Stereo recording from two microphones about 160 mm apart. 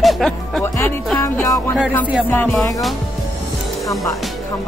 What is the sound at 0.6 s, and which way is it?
Music, 15° left (ahead or behind).